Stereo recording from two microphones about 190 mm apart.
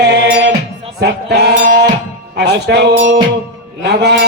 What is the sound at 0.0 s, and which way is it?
Music, 60° right (ahead or behind).